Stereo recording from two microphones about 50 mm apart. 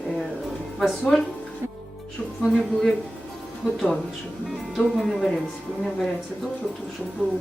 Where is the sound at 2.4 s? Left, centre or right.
Centre.